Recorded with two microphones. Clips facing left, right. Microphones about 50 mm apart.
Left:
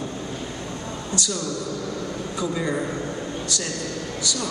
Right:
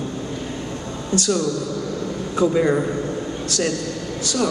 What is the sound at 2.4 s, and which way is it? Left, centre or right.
Speech, right.